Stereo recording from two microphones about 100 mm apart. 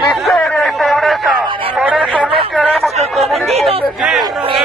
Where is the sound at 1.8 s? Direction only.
10° right (ahead or behind).